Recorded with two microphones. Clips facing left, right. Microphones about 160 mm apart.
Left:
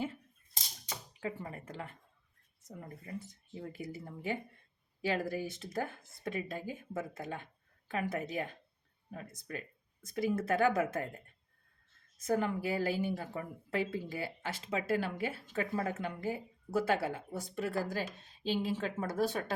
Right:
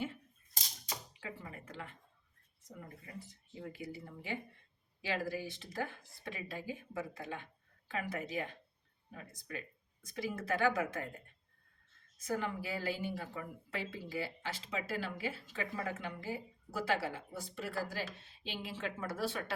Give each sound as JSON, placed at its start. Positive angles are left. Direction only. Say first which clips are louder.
{"t": 1.2, "sound": "a woman's voice", "louder": "left 7 dB", "side_deg": 45}
{"t": 3.6, "sound": "a woman's voice", "louder": "left 2 dB", "side_deg": 45}
{"t": 12.2, "sound": "a woman's voice", "louder": "left 5 dB", "side_deg": 45}